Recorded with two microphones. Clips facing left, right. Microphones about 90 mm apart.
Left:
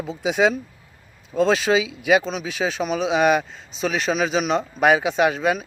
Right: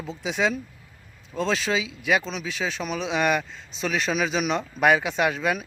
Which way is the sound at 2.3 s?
45° left (ahead or behind).